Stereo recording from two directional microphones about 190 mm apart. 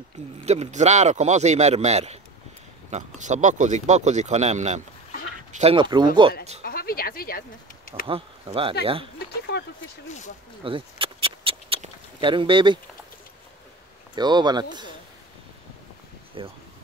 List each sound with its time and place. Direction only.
0.5 s speech: 35° right (ahead or behind)
6.6 s speech: 50° left (ahead or behind)
8.1 s speech: 30° right (ahead or behind)
9.3 s a sound: 65° left (ahead or behind)
10.0 s speech: 40° left (ahead or behind)
10.6 s a sound: 30° right (ahead or behind)
14.1 s speech: 20° right (ahead or behind)
16.4 s speech: 30° right (ahead or behind)